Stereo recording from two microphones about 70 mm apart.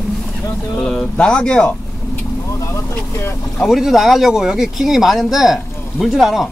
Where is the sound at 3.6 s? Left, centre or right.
Centre.